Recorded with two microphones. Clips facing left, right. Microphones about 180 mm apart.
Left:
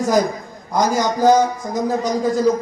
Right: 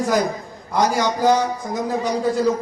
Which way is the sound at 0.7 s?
45° left (ahead or behind).